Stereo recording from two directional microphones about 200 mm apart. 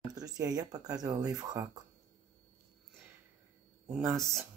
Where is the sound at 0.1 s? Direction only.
20° right (ahead or behind).